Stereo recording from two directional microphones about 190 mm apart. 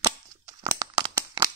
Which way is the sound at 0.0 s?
20° right (ahead or behind).